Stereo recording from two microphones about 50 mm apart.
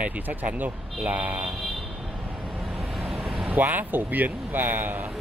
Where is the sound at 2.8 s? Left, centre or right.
Centre.